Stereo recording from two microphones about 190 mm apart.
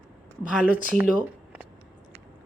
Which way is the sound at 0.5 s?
10° right (ahead or behind).